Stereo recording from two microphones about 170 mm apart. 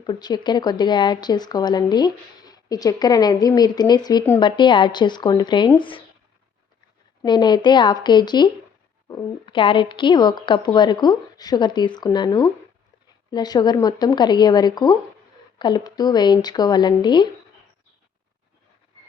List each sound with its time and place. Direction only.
0.0 s speech: 25° left (ahead or behind)
7.3 s speech: 25° left (ahead or behind)